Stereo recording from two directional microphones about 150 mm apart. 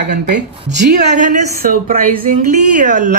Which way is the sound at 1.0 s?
55° right (ahead or behind).